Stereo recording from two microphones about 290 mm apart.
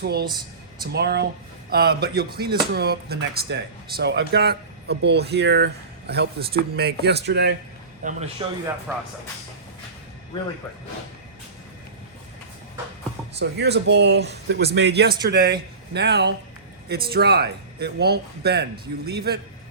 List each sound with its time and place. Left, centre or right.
0.0 s speech: right
0.3 s speech: centre
0.9 s a man's voice: right; by 8.6 s centre
13.4 s speech: right